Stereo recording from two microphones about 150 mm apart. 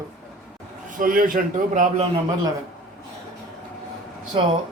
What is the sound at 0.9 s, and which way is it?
A man's voice, 65° right (ahead or behind).